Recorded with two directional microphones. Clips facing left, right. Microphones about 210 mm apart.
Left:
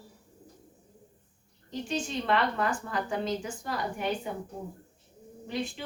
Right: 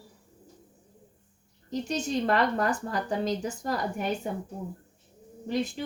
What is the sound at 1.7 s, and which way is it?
A woman's voice, 40° right (ahead or behind).